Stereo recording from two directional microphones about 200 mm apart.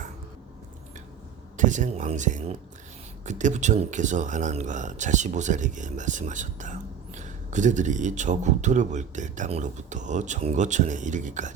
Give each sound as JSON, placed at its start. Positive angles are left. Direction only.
{"t": 1.5, "sound": "speech", "side_deg": -40}